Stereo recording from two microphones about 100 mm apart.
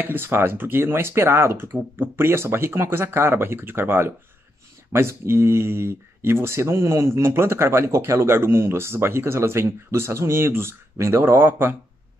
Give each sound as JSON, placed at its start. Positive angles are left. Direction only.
{"t": 0.0, "sound": "speech", "side_deg": -20}